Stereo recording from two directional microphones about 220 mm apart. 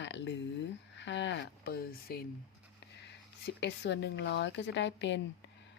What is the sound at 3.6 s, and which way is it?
Speech, 55° left (ahead or behind).